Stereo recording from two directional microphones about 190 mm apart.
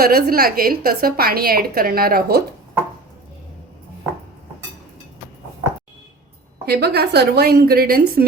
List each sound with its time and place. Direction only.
0.0 s a woman's voice: 55° right (ahead or behind)
6.7 s a woman's voice: 60° right (ahead or behind)